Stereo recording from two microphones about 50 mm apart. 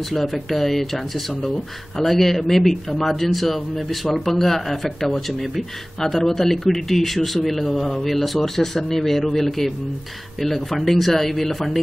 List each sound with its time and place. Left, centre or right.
0.1 s speech: centre